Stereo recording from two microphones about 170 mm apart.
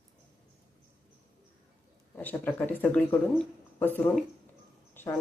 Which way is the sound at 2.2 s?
10° left (ahead or behind).